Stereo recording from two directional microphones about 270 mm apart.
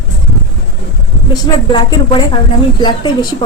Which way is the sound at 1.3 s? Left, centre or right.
Centre.